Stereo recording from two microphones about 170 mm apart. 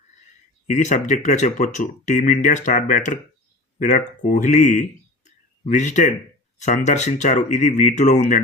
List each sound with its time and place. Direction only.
0.7 s speech: 45° left (ahead or behind)